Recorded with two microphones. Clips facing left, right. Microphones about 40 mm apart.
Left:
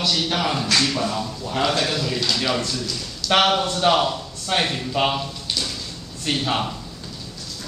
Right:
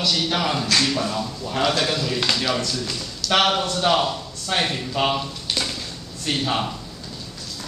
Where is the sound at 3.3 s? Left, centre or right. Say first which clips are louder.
Left 1 dB; centre.